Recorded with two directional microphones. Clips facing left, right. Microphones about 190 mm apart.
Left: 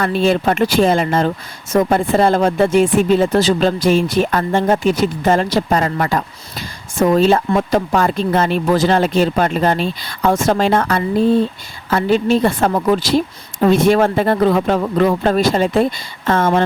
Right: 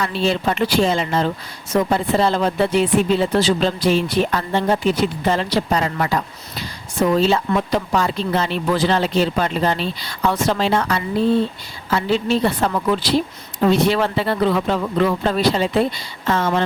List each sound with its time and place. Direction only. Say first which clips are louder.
0.0 s a woman's voice: left 5 dB; 50° left (ahead or behind)